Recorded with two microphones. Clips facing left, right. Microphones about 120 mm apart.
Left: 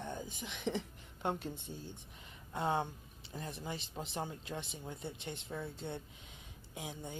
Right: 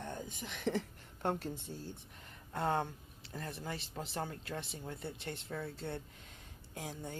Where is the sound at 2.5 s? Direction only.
15° left (ahead or behind).